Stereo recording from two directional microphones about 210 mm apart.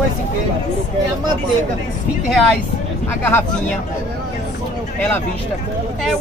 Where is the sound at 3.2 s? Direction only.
10° left (ahead or behind).